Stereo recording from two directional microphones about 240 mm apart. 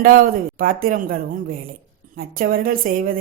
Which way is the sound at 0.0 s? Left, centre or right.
Right.